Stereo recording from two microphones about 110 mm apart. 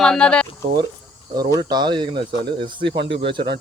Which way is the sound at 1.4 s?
40° right (ahead or behind).